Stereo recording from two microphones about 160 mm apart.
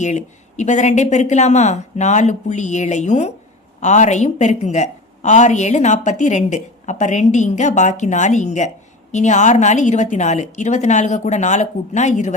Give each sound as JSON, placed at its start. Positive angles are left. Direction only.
{"t": 0.0, "sound": "a woman's voice", "side_deg": 45}